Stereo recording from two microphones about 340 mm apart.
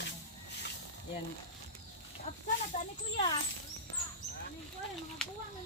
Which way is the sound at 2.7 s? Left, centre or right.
Centre.